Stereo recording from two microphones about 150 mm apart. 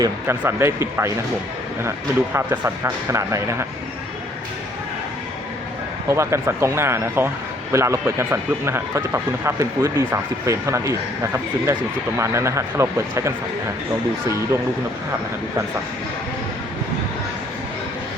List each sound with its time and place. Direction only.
0.0 s speech: 15° right (ahead or behind)
2.3 s speech: 15° right (ahead or behind)
6.1 s speech: 20° right (ahead or behind)